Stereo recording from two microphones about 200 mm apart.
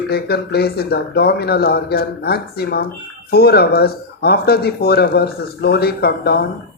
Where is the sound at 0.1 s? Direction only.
55° left (ahead or behind).